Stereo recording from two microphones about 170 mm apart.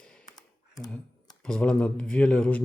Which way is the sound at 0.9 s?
5° left (ahead or behind).